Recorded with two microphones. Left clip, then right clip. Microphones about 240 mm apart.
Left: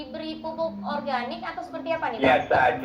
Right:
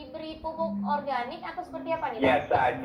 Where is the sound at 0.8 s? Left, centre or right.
Left.